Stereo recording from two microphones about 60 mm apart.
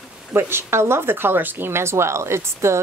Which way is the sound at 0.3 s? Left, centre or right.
Right.